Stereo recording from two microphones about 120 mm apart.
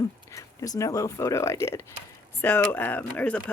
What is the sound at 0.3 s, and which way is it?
Speech, 30° left (ahead or behind).